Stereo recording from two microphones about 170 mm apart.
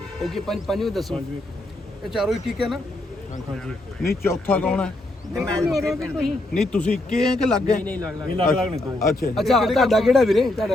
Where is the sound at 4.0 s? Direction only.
65° left (ahead or behind).